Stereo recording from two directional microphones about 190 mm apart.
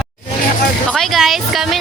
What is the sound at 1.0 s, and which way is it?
Speech, centre (ahead or behind).